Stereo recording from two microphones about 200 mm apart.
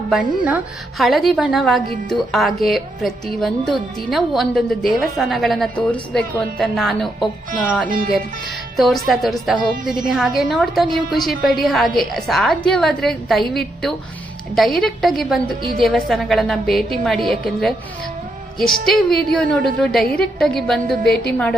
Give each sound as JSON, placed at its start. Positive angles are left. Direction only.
{"t": 0.1, "sound": "a woman's voice", "side_deg": -5}
{"t": 7.9, "sound": "speech", "side_deg": -45}
{"t": 8.7, "sound": "a woman's voice", "side_deg": 0}
{"t": 21.0, "sound": "a woman's voice", "side_deg": 55}